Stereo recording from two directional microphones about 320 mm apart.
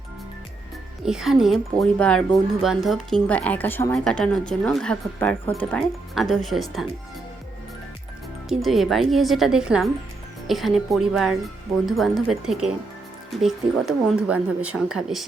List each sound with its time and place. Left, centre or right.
1.0 s speech: centre
8.4 s speech: centre